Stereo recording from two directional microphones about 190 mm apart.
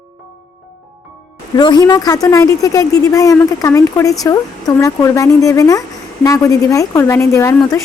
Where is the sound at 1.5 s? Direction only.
20° left (ahead or behind).